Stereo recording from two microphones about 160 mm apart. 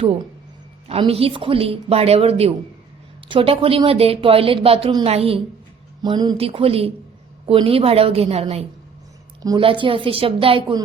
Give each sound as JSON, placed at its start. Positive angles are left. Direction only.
{"t": 0.9, "sound": "speech", "side_deg": -40}
{"t": 6.0, "sound": "speech", "side_deg": -25}
{"t": 9.4, "sound": "speech", "side_deg": -30}